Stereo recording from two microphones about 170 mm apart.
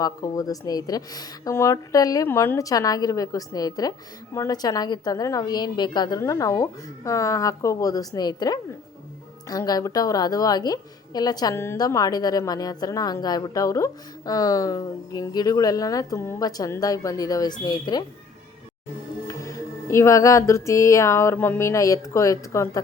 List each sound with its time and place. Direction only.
0.0 s a woman's voice: 20° left (ahead or behind)
19.3 s speech: 20° left (ahead or behind)